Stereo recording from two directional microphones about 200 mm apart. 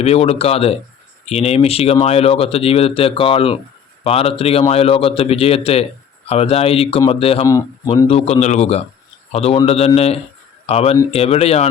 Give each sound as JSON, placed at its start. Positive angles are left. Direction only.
{"t": 0.0, "sound": "speech", "side_deg": 30}